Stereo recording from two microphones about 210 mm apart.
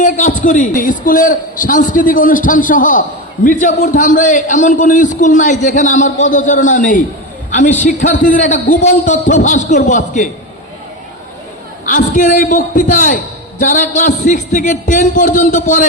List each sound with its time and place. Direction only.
0.0 s a man's voice: 35° left (ahead or behind)
11.9 s a man's voice: 40° left (ahead or behind)